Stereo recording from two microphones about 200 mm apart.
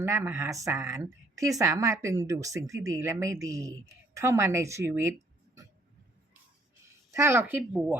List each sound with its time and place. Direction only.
0.0 s speech: 15° right (ahead or behind)
7.1 s speech: 15° right (ahead or behind)